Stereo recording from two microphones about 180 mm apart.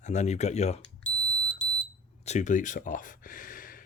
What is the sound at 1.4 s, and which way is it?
Smoke detector, 45° left (ahead or behind).